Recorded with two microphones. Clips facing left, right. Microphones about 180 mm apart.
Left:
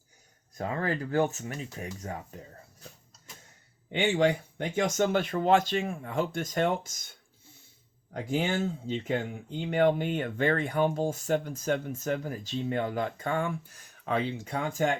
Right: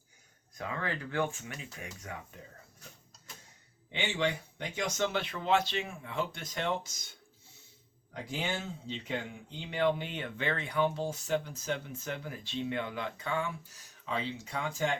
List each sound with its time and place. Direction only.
0.5 s speech: 40° left (ahead or behind)
3.9 s speech: 50° left (ahead or behind)
8.1 s speech: 50° left (ahead or behind)